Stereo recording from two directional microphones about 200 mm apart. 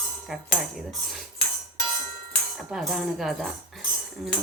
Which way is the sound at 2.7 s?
Centre (ahead or behind).